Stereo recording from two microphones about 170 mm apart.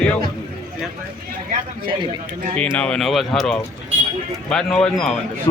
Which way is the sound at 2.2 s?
50° right (ahead or behind).